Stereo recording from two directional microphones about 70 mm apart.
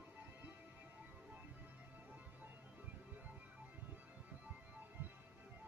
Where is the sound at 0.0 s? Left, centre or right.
Right.